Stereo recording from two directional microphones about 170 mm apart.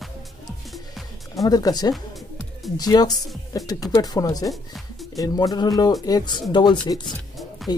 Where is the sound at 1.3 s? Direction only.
20° left (ahead or behind).